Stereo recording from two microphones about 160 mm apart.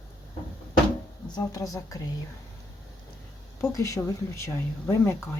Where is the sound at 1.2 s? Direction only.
25° left (ahead or behind).